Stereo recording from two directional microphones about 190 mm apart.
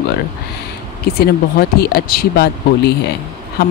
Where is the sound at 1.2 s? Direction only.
55° left (ahead or behind).